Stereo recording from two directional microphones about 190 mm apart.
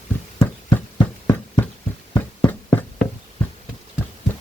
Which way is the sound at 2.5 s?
10° left (ahead or behind).